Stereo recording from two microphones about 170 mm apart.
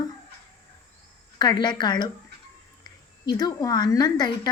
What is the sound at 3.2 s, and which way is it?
Speech, 20° left (ahead or behind).